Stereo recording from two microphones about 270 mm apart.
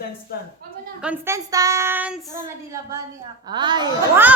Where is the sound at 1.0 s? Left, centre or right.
Centre.